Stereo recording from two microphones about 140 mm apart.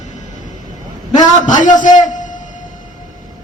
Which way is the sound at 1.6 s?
65° left (ahead or behind).